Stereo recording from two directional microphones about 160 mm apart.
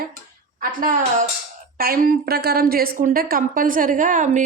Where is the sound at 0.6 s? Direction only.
60° right (ahead or behind).